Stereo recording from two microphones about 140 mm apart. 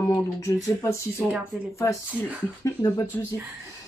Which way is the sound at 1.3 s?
10° right (ahead or behind).